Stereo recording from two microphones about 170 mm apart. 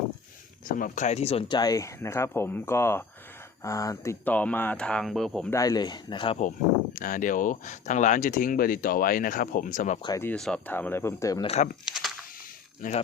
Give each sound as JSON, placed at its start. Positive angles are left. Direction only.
{"t": 0.8, "sound": "speech", "side_deg": 45}
{"t": 5.5, "sound": "speech", "side_deg": 20}
{"t": 6.9, "sound": "speech", "side_deg": 50}
{"t": 10.0, "sound": "speech", "side_deg": 20}
{"t": 10.2, "sound": "speech", "side_deg": 5}
{"t": 11.4, "sound": "speech", "side_deg": 40}
{"t": 12.8, "sound": "speech", "side_deg": 50}